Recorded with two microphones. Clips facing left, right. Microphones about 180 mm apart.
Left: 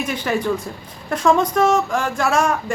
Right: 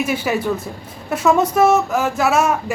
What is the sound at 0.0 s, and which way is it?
Speech, 5° right (ahead or behind).